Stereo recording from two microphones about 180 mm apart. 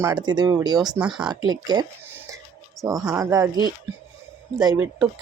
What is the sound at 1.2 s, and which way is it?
Speech, 20° right (ahead or behind).